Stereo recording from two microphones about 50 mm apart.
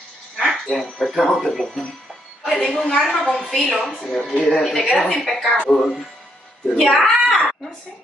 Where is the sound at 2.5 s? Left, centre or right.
Centre.